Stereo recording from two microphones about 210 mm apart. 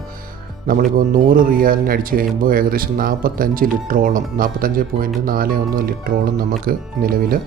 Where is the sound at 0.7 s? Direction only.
40° right (ahead or behind).